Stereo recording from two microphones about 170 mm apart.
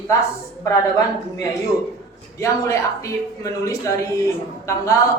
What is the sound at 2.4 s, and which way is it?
A woman's voice, 20° left (ahead or behind).